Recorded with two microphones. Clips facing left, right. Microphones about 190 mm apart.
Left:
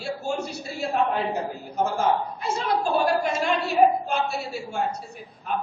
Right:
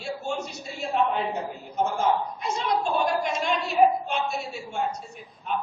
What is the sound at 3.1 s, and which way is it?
A man's voice, 5° left (ahead or behind).